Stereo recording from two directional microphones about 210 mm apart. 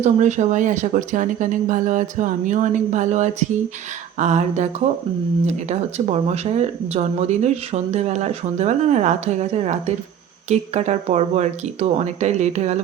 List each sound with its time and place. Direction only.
0.0 s speech: 35° right (ahead or behind)